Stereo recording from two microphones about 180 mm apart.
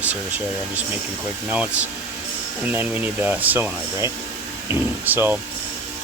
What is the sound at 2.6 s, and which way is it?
Speech, 10° right (ahead or behind).